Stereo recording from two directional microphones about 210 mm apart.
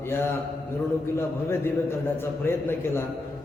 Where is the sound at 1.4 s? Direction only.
10° left (ahead or behind).